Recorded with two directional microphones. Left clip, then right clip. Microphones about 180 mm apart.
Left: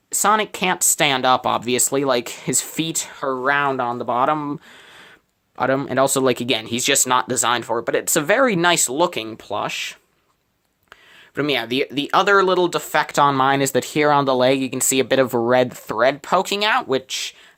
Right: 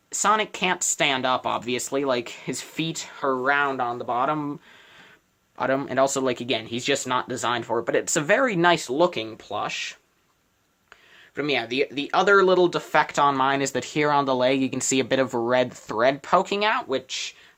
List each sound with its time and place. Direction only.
0.1 s speech: 50° left (ahead or behind)
5.5 s speech: 35° left (ahead or behind); by 10.0 s 70° left (ahead or behind)
11.3 s speech: 70° left (ahead or behind)